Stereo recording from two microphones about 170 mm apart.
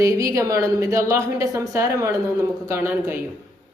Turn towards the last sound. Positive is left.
turn(degrees=-15)  # may be behind; listen again after turning